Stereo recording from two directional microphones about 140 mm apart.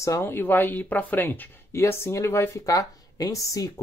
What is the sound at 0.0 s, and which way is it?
Speech, 20° left (ahead or behind).